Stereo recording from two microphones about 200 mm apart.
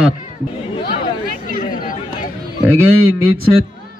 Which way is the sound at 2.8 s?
90° right.